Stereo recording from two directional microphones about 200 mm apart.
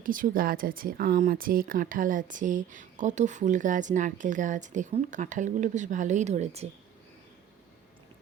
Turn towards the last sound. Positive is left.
turn(degrees=-35)  # may be behind; listen again after turning